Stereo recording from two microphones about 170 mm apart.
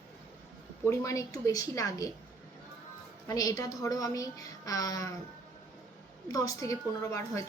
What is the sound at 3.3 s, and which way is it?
Speech, 20° left (ahead or behind).